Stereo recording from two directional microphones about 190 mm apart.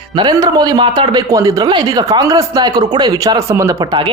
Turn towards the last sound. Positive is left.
turn(degrees=-20)  # may be behind; listen again after turning